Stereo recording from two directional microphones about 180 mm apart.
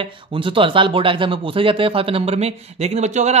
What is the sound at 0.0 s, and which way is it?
Speech, 30° right (ahead or behind).